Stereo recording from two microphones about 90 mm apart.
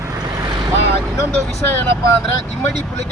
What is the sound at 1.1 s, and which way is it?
Vehicle, 30° left (ahead or behind).